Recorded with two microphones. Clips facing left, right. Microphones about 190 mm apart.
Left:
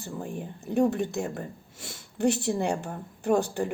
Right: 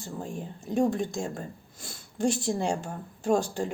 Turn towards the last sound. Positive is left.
turn(degrees=60)  # may be behind; listen again after turning